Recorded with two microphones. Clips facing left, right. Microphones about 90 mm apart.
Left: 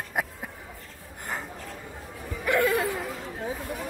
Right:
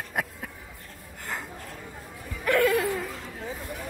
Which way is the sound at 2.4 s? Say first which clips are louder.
Right 1 dB; 20° left (ahead or behind).